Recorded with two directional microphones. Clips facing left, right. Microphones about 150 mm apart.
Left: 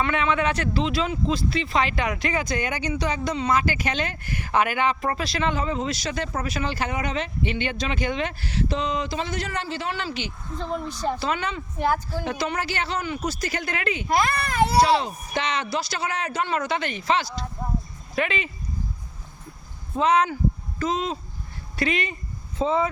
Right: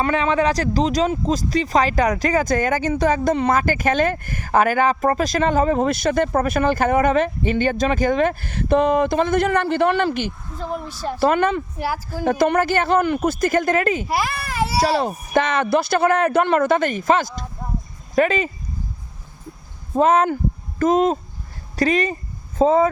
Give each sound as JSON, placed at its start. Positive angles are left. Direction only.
{"t": 0.0, "sound": "speech", "side_deg": -35}
{"t": 10.6, "sound": "a child's voice", "side_deg": -5}
{"t": 11.2, "sound": "speech", "side_deg": -50}
{"t": 11.8, "sound": "speech", "side_deg": -5}
{"t": 12.2, "sound": "speech", "side_deg": -50}
{"t": 14.1, "sound": "a child's voice", "side_deg": -5}
{"t": 14.8, "sound": "speech", "side_deg": -50}
{"t": 20.0, "sound": "speech", "side_deg": -45}